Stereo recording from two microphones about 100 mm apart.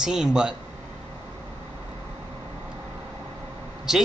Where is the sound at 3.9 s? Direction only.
5° right (ahead or behind).